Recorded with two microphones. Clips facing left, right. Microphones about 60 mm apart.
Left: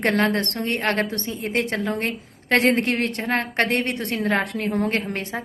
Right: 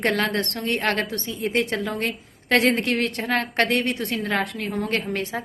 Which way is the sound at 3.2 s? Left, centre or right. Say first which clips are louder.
Even; left.